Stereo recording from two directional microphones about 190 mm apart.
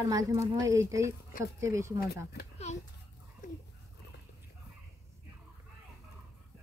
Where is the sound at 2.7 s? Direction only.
35° left (ahead or behind).